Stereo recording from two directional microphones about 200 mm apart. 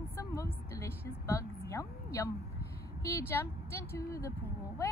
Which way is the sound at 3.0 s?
15° left (ahead or behind).